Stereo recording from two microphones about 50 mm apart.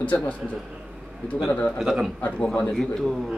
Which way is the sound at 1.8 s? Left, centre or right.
Centre.